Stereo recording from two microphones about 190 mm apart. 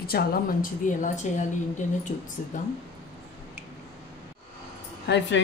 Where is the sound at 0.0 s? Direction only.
50° left (ahead or behind).